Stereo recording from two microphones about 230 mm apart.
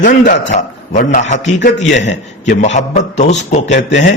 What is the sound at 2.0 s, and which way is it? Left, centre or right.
Speech, left.